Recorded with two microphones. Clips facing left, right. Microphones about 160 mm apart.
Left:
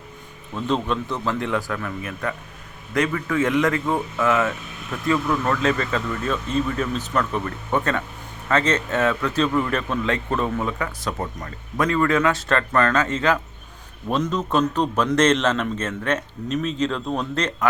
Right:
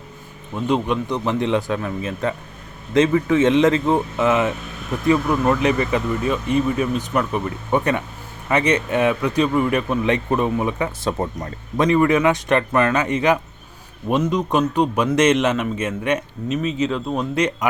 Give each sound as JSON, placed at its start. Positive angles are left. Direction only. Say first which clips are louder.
{"t": 0.5, "sound": "a man's voice", "louder": "right 3 dB", "side_deg": -15}